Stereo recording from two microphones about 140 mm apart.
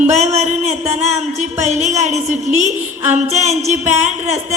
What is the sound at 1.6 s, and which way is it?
A woman's voice, 55° right (ahead or behind).